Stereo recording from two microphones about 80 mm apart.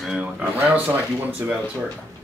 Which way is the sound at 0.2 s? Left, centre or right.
Centre.